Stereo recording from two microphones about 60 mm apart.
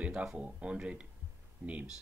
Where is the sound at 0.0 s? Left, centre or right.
Centre.